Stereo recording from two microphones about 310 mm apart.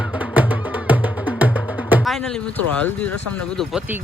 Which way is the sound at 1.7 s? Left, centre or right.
Centre.